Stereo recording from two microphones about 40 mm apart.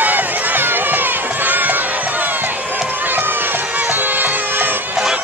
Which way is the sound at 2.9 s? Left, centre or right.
Right.